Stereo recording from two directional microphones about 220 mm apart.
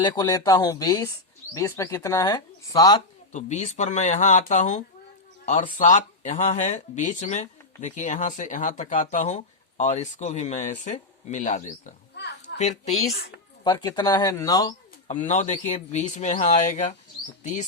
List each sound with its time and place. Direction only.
0.0 s speech: 15° left (ahead or behind)
3.3 s speech: 35° left (ahead or behind)
12.1 s oink: 50° left (ahead or behind)
12.5 s speech: 30° left (ahead or behind)
13.7 s speech: 20° left (ahead or behind)
15.0 s speech: 35° left (ahead or behind)